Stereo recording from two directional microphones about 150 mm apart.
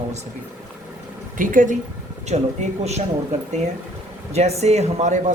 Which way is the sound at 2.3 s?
45° right (ahead or behind).